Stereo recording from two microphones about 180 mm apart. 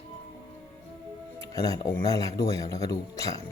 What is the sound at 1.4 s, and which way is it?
Speech, 20° left (ahead or behind).